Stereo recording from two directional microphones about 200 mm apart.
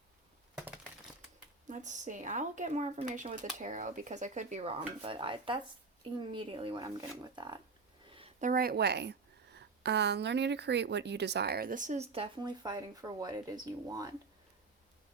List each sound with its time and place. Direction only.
1.6 s a woman's voice: 40° right (ahead or behind); by 7.6 s 20° right (ahead or behind)
8.1 s a sound: 30° right (ahead or behind)
8.4 s a woman's voice: 50° right (ahead or behind); by 14.2 s 20° right (ahead or behind)